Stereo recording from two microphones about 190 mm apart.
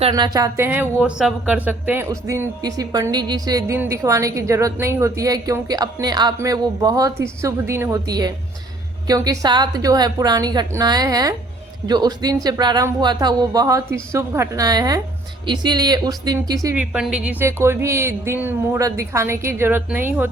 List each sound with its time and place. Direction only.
0.1 s a woman's voice: 20° right (ahead or behind)
16.6 s a woman's voice: 5° right (ahead or behind)